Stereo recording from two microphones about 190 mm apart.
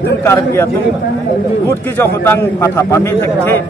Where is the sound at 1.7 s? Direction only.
10° left (ahead or behind).